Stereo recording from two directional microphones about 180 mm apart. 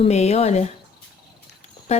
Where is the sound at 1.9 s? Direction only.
35° left (ahead or behind).